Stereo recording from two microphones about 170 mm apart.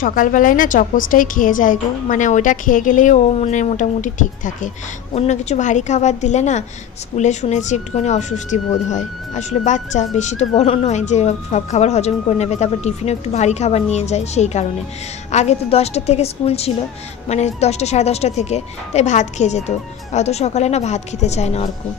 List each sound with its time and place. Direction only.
0.0 s a woman's voice: 50° left (ahead or behind)